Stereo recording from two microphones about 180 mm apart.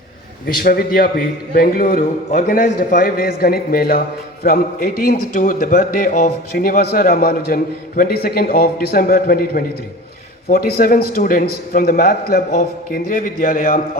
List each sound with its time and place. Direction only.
0.4 s a man's voice: 55° left (ahead or behind)